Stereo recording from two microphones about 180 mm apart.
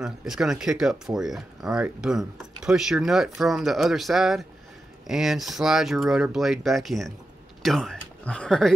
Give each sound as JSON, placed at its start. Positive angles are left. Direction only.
{"t": 0.0, "sound": "speech", "side_deg": 0}